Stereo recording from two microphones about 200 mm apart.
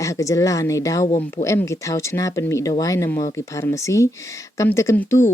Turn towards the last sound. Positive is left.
turn(degrees=10)  # may be behind; listen again after turning